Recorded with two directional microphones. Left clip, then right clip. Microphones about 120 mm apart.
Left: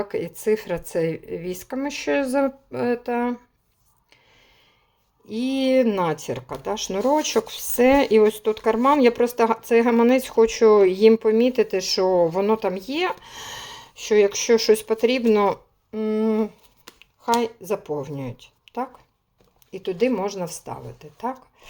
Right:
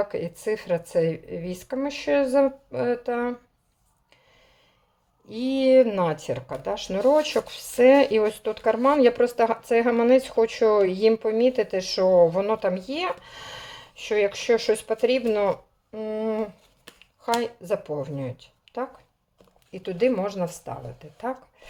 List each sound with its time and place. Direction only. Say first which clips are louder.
0.0 s speech: left 2 dB; 35° left (ahead or behind)
5.2 s speech: right 1 dB; 30° left (ahead or behind)